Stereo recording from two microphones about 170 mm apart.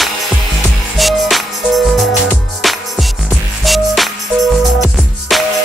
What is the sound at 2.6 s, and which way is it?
Music, centre (ahead or behind).